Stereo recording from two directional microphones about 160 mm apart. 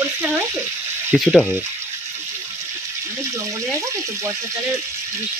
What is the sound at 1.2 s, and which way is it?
Speech, centre (ahead or behind).